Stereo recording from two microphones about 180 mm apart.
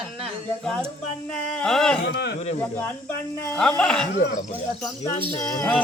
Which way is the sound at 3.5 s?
5° left (ahead or behind).